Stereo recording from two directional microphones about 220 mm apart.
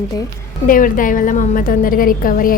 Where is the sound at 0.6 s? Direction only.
40° left (ahead or behind).